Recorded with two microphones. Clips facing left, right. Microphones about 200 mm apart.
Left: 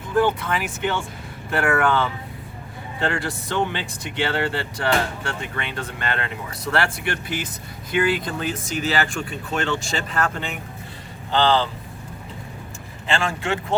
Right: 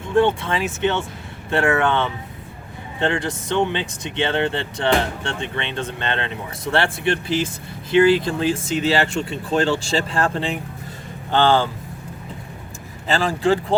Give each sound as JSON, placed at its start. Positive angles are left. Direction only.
{"t": 0.1, "sound": "speech", "side_deg": -25}
{"t": 11.3, "sound": "speech", "side_deg": -50}
{"t": 13.1, "sound": "speech", "side_deg": -35}